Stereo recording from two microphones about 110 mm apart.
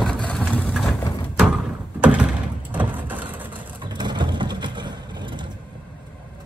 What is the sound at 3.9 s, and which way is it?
Vehicle, 40° right (ahead or behind).